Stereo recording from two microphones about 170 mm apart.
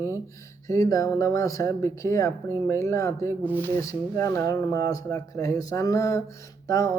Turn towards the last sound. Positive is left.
turn(degrees=20)  # may be behind; listen again after turning